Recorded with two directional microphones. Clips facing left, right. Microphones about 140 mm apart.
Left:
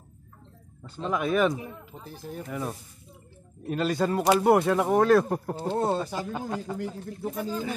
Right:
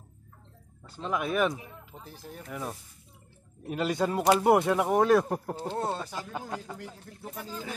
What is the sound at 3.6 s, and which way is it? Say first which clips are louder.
Speech: left 2 dB; 15° right (ahead or behind).